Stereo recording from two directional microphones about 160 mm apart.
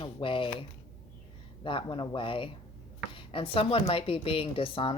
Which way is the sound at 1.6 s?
30° left (ahead or behind).